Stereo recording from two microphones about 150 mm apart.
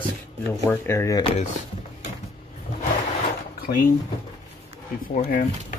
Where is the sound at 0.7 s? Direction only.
15° left (ahead or behind).